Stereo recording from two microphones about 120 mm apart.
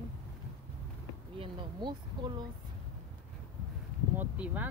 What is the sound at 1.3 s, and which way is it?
Speech, 45° right (ahead or behind).